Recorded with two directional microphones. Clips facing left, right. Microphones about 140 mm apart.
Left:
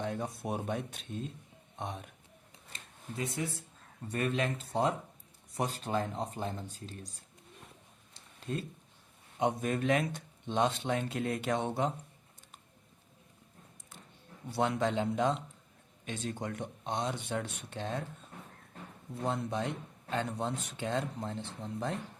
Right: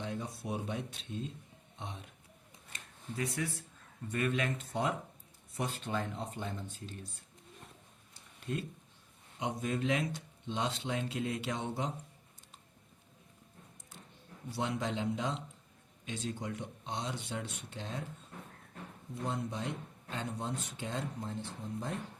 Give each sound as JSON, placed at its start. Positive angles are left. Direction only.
{"t": 0.0, "sound": "speech", "side_deg": 50}
{"t": 2.7, "sound": "speech", "side_deg": 25}
{"t": 4.1, "sound": "speech", "side_deg": 35}
{"t": 8.5, "sound": "speech", "side_deg": 30}
{"t": 9.4, "sound": "speech", "side_deg": 55}
{"t": 14.5, "sound": "speech", "side_deg": 60}
{"t": 19.2, "sound": "speech", "side_deg": 65}